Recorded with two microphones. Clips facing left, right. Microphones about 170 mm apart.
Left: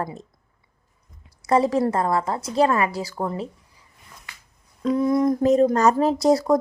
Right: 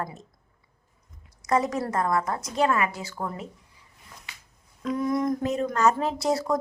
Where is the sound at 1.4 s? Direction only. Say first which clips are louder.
Left 6 dB; 30° left (ahead or behind).